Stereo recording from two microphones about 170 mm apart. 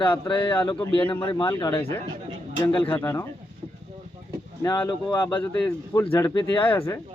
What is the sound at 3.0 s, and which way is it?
Speech, 15° left (ahead or behind).